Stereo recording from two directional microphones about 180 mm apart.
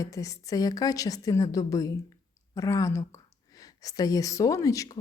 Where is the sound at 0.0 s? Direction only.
20° left (ahead or behind).